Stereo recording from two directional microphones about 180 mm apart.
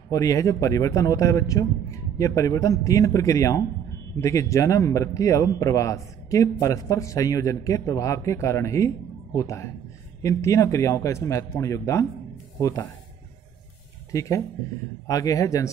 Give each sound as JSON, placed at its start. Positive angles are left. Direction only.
{"t": 0.1, "sound": "speech", "side_deg": 20}
{"t": 14.1, "sound": "a man's voice", "side_deg": 15}